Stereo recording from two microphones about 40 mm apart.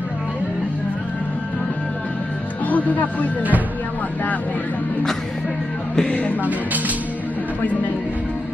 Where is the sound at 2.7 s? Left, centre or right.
Left.